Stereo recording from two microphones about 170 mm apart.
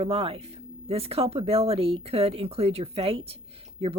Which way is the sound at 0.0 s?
35° right (ahead or behind).